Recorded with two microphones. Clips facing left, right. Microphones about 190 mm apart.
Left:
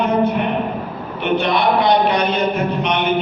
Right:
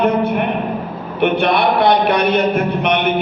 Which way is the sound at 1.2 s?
60° right (ahead or behind).